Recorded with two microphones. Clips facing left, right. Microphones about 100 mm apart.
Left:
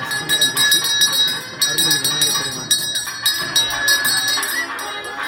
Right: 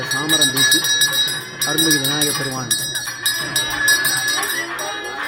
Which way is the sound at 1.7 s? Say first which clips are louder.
Right 7 dB; 35° right (ahead or behind).